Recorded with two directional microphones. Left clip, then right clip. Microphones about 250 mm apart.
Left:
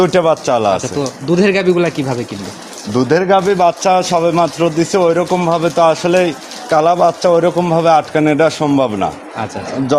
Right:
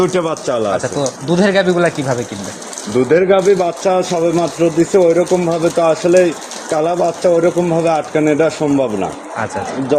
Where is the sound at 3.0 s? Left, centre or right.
Left.